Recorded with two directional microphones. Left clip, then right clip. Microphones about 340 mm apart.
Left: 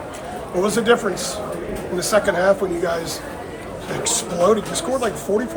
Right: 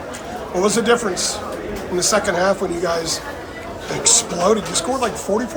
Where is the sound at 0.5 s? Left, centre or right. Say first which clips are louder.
Right 1 dB; centre.